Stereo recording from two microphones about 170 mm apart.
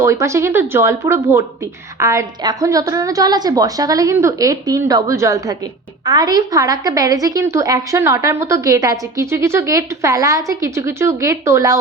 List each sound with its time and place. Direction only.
0.0 s a woman's voice: 15° right (ahead or behind)